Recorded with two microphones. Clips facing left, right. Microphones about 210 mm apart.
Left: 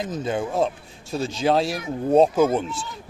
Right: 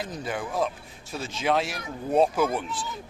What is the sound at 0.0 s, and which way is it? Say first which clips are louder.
Speech: left 6 dB; 25° left (ahead or behind).